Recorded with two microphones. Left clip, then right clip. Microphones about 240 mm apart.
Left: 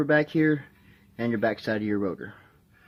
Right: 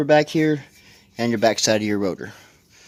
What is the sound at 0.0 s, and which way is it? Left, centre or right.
Speech, right.